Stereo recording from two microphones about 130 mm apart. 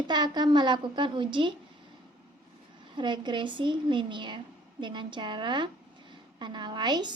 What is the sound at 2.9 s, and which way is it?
A woman's voice, 35° right (ahead or behind).